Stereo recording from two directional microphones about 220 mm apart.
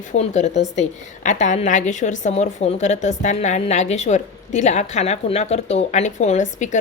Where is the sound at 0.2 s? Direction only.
30° left (ahead or behind).